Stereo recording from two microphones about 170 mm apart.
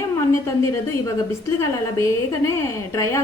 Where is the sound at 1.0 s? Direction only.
15° left (ahead or behind).